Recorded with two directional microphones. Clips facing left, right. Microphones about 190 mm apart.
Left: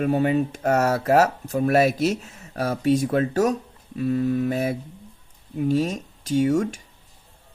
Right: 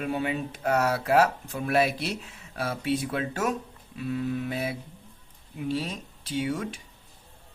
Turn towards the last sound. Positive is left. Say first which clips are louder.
# left 9 dB
turn(degrees=45)  # may be behind; listen again after turning